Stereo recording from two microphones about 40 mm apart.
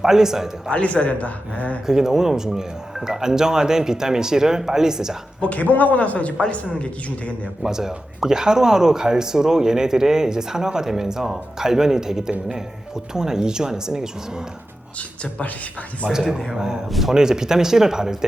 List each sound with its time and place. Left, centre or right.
0.0 s speech: centre
0.7 s speech: left
1.9 s speech: centre
5.4 s speech: left
7.6 s speech: centre
16.0 s a man's voice: right
16.6 s speech: centre
16.9 s a man's voice: centre
17.2 s speech: centre